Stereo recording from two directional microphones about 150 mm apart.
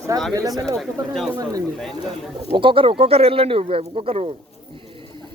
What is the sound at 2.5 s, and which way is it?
Speech, 35° right (ahead or behind).